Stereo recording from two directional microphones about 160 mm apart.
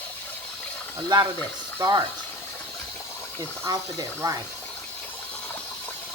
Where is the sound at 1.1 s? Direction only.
25° right (ahead or behind).